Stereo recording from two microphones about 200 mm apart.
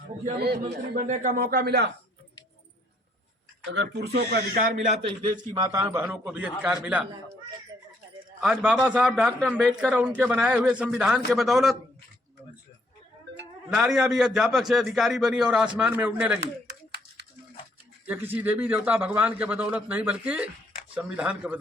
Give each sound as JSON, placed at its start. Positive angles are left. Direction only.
{"t": 0.3, "sound": "speech", "side_deg": -55}
{"t": 1.0, "sound": "speech", "side_deg": -40}
{"t": 3.7, "sound": "speech", "side_deg": -60}
{"t": 4.5, "sound": "a man's voice", "side_deg": -40}
{"t": 5.5, "sound": "a man's voice", "side_deg": -15}
{"t": 8.4, "sound": "a man's voice", "side_deg": 0}
{"t": 13.7, "sound": "a man's voice", "side_deg": 0}
{"t": 18.0, "sound": "a man's voice", "side_deg": -10}